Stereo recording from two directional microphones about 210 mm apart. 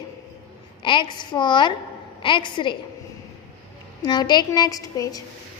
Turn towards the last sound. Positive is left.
turn(degrees=15)  # may be behind; listen again after turning